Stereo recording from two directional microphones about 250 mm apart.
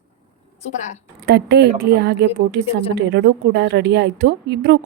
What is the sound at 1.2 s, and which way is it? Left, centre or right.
Speech, right.